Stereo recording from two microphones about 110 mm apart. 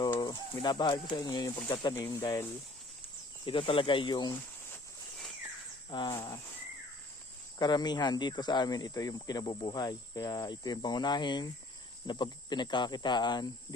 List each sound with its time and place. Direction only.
0.0 s bird: 40° left (ahead or behind)
0.6 s speech: 40° left (ahead or behind)
1.9 s speech: 25° left (ahead or behind)
3.4 s speech: 50° left (ahead or behind)
5.9 s speech: 40° left (ahead or behind)
7.6 s speech: 40° left (ahead or behind)